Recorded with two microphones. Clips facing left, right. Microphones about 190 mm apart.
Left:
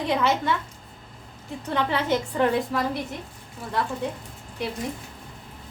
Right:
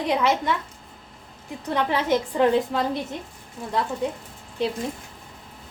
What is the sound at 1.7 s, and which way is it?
A woman's voice, 15° right (ahead or behind).